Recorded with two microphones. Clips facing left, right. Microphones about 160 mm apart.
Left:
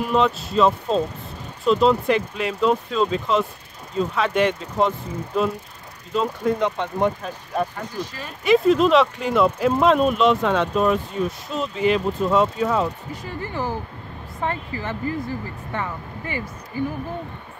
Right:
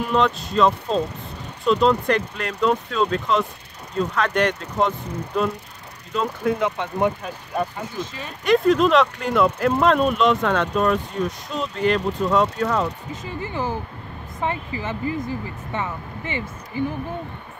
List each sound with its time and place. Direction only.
0.1 s speech: 5° left (ahead or behind)
7.7 s speech: 20° right (ahead or behind)
8.5 s speech: centre (ahead or behind)
13.1 s speech: 20° right (ahead or behind)